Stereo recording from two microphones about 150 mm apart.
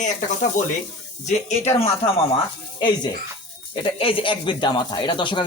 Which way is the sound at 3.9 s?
35° left (ahead or behind).